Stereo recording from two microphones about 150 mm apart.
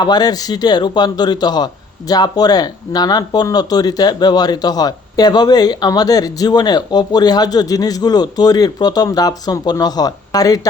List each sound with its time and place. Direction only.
0.0 s a man's voice: 25° left (ahead or behind)